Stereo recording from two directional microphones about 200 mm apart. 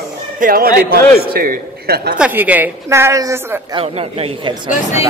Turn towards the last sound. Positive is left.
turn(degrees=35)  # may be behind; listen again after turning